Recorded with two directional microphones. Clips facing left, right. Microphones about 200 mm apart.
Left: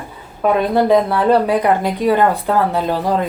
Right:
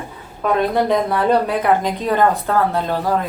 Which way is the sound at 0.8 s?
5° left (ahead or behind).